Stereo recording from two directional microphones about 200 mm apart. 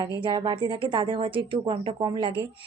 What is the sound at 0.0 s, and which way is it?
A woman's voice, 20° right (ahead or behind).